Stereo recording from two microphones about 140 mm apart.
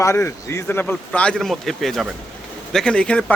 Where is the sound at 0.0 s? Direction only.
20° left (ahead or behind).